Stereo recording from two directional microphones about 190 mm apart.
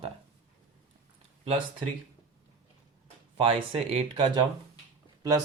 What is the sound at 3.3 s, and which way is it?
Speech, 30° right (ahead or behind).